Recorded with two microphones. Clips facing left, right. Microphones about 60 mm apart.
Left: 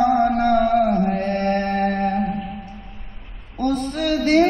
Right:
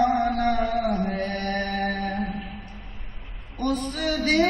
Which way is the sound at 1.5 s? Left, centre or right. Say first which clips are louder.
Left 6 dB; left.